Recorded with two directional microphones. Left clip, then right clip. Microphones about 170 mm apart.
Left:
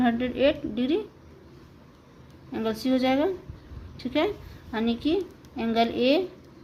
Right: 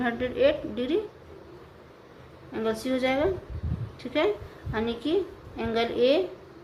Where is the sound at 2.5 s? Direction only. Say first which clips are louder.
Left 1 dB; 40° left (ahead or behind).